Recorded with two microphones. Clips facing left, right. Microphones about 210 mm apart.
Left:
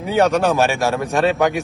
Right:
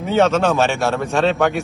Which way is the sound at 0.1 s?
15° left (ahead or behind).